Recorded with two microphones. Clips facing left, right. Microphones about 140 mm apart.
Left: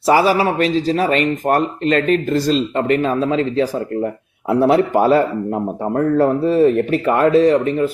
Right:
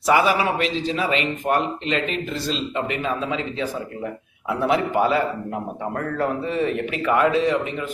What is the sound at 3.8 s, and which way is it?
Speech, 50° left (ahead or behind).